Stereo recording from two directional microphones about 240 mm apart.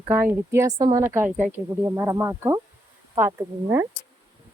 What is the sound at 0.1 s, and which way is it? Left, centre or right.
Speech, centre.